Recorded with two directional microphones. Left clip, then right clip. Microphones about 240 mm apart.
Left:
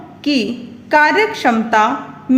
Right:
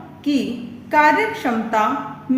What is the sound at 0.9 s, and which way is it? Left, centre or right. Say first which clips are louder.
Speech: left 3 dB; left.